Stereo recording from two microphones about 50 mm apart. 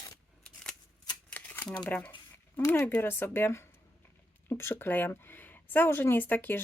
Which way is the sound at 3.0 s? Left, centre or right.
Left.